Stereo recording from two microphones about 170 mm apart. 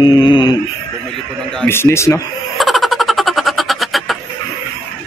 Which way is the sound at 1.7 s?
15° left (ahead or behind).